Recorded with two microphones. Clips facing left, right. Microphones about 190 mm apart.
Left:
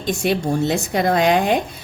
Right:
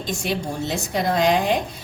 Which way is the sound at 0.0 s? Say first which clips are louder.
Left 6 dB; 60° left (ahead or behind).